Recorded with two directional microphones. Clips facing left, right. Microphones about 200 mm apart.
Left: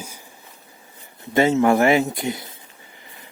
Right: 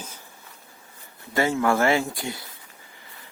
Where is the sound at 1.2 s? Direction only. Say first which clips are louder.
Left 6 dB; 20° left (ahead or behind).